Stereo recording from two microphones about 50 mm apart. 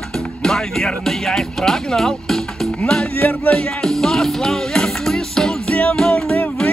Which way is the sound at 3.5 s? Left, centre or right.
Centre.